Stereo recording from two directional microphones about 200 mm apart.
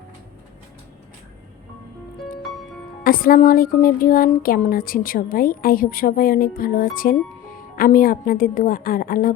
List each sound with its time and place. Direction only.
3.0 s speech: 45° left (ahead or behind)